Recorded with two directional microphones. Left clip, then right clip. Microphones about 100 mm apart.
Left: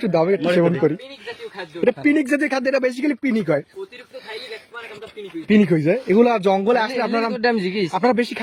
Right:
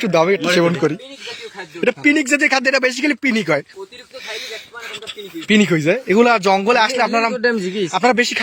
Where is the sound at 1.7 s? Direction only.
10° left (ahead or behind).